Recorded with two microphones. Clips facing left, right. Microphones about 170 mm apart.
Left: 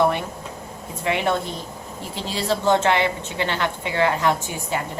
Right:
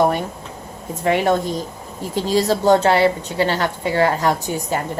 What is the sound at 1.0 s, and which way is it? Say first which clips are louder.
A woman's voice: right 5 dB; 40° right (ahead or behind).